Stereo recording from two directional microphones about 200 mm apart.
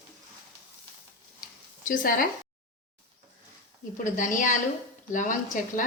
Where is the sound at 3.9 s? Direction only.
40° left (ahead or behind).